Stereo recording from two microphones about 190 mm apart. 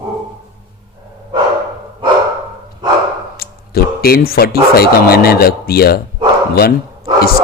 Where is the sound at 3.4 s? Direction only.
55° left (ahead or behind).